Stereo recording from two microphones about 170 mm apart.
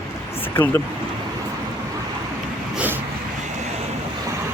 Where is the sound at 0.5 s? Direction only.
10° left (ahead or behind).